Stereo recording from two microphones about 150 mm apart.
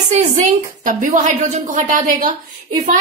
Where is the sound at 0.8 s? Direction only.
60° right (ahead or behind).